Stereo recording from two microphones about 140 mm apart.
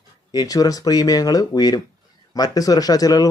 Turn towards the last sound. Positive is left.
turn(degrees=25)  # may be behind; listen again after turning